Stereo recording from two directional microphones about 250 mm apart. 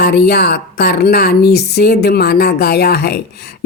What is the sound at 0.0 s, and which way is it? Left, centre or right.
Speech, left.